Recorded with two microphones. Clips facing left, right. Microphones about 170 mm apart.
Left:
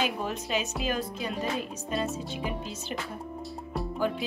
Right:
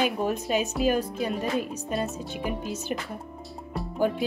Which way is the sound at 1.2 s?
Centre (ahead or behind).